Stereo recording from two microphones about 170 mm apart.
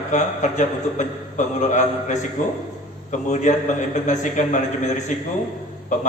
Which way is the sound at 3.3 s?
45° left (ahead or behind).